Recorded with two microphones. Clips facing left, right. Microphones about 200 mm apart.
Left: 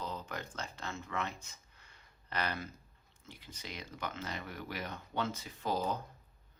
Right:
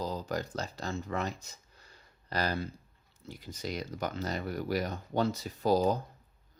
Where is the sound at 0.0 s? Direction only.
35° right (ahead or behind).